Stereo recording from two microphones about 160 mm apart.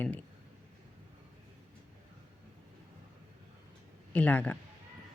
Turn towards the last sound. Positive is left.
turn(degrees=10)  # may be behind; listen again after turning